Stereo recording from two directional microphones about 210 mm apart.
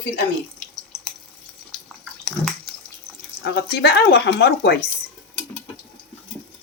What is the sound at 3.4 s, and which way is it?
Speech, 50° left (ahead or behind).